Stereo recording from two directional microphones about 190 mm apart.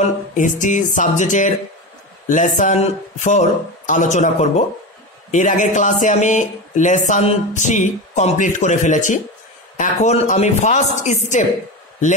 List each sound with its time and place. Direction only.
0.3 s speech: 40° left (ahead or behind)